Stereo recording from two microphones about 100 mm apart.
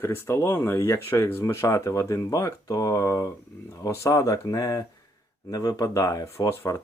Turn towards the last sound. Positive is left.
turn(degrees=30)  # may be behind; listen again after turning